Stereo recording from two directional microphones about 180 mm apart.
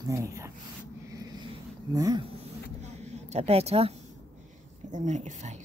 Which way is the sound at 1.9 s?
20° right (ahead or behind).